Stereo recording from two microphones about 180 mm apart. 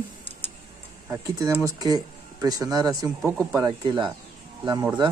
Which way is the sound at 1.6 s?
20° right (ahead or behind).